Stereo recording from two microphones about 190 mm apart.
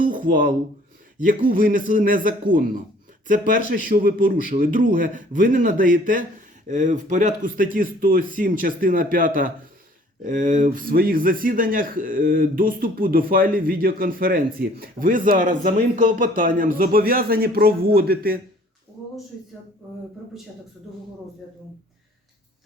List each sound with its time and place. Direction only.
0.0 s a man's voice: 45° right (ahead or behind)